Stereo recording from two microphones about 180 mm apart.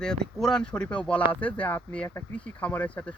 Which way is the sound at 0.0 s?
5° left (ahead or behind).